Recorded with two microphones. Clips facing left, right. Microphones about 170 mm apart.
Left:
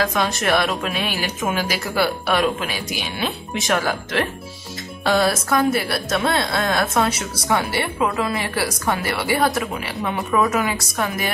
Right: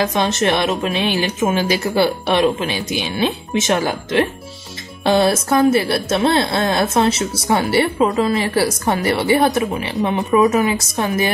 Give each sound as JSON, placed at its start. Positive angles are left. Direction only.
{"t": 0.0, "sound": "a woman's voice", "side_deg": -25}